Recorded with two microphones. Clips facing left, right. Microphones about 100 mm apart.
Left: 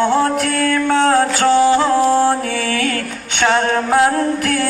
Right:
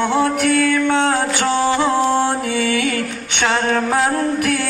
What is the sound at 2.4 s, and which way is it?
Music, 15° right (ahead or behind).